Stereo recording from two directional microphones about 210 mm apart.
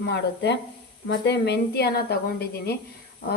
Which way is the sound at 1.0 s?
55° left (ahead or behind).